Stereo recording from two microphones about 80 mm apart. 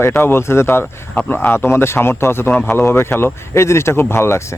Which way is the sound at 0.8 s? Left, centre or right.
Centre.